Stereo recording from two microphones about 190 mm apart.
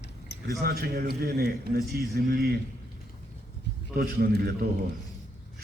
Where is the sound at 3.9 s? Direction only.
55° right (ahead or behind).